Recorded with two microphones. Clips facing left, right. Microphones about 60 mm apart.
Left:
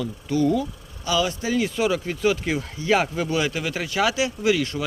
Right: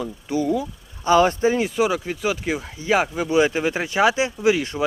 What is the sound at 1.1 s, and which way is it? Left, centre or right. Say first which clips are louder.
Speech: right 7 dB; right.